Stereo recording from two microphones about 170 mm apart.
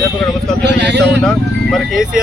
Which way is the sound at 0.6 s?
90° right.